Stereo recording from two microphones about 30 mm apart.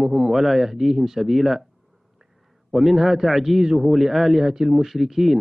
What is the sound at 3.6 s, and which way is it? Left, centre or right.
Speech, centre.